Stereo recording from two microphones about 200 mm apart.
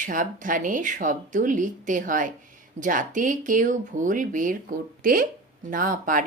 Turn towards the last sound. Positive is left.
turn(degrees=-45)  # may be behind; listen again after turning